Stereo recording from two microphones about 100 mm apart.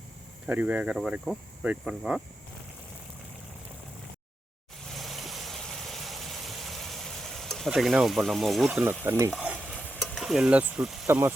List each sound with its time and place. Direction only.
0.4 s speech: 15° right (ahead or behind)
4.9 s vehicle: centre (ahead or behind)
8.7 s stir: 20° right (ahead or behind)
9.6 s stir: centre (ahead or behind)
11.0 s speech: 25° right (ahead or behind)